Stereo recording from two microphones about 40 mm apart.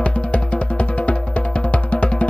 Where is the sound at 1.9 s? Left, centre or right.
Left.